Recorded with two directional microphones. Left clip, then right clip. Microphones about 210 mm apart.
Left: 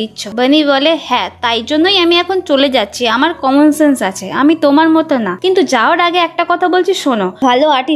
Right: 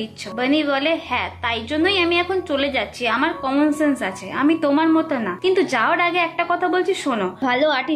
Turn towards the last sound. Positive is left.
turn(degrees=35)  # may be behind; listen again after turning